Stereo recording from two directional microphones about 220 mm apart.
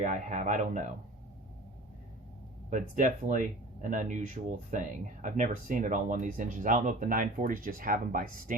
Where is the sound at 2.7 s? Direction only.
35° right (ahead or behind).